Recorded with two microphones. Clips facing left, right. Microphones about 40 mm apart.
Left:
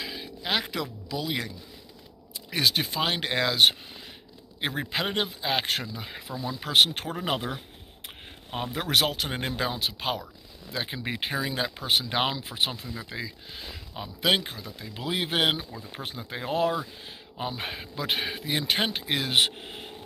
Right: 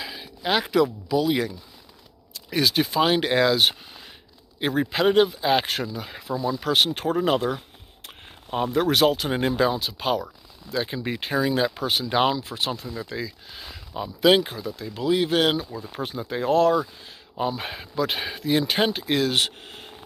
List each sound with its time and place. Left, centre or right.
0.0 s a sound: centre
1.0 s speech: centre
2.5 s speech: centre
8.7 s speech: centre
11.3 s speech: centre
12.4 s speech: left
12.9 s speech: centre
15.0 s speech: left
15.9 s speech: centre